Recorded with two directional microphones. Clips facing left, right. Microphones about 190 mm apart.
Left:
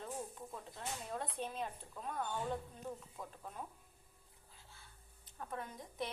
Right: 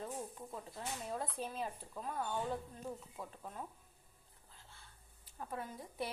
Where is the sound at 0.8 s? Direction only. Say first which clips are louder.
Right 1 dB; 5° right (ahead or behind).